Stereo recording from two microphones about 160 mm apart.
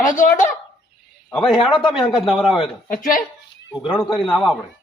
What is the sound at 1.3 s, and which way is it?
Speech, centre (ahead or behind).